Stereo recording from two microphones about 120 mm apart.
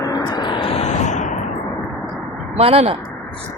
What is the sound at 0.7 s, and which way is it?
Vehicle, 70° left (ahead or behind).